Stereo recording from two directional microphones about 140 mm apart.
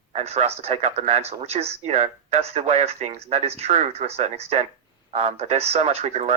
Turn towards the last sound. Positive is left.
turn(degrees=-50)  # may be behind; listen again after turning